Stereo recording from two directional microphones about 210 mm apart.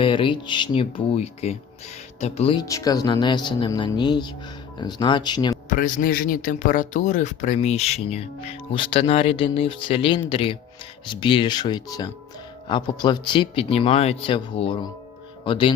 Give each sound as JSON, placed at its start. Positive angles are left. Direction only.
{"t": 0.0, "sound": "speech", "side_deg": 25}
{"t": 5.6, "sound": "speech", "side_deg": 40}